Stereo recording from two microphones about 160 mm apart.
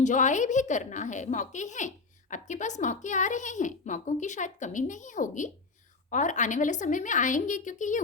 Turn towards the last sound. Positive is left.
turn(degrees=50)  # may be behind; listen again after turning